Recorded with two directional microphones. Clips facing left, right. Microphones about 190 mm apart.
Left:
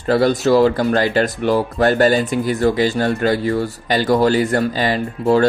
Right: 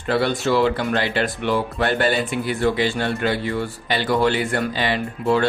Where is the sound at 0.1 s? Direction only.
40° left (ahead or behind).